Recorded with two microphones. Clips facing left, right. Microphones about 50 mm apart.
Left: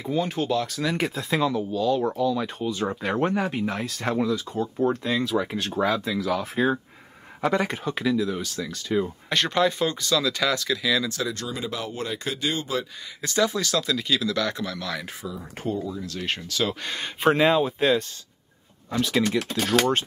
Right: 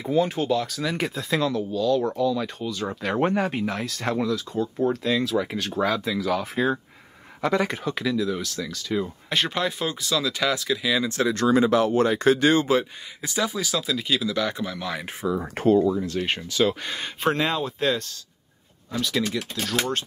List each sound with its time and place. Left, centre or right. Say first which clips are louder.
0.0 s speech: right 3 dB; centre; by 2.9 s left
2.9 s speech: even; centre
3.2 s speech: right 3 dB; centre
9.3 s speech: left 3 dB; centre
11.3 s speech: right 12 dB; right
13.2 s speech: left 3 dB; centre
15.3 s speech: right 11 dB; right
16.2 s speech: right 4 dB; centre
16.6 s speech: right 4 dB; centre
18.9 s speech: left 2 dB; left